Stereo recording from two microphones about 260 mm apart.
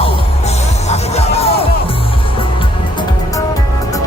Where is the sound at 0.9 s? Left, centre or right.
Left.